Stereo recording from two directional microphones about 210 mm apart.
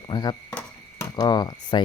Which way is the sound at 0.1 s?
20° left (ahead or behind).